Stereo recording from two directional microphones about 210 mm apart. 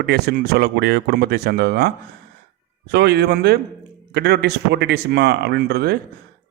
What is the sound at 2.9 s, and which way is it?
Speech, 50° right (ahead or behind).